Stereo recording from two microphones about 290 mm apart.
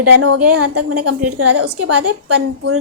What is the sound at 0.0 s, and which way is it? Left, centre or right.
A woman's voice, right.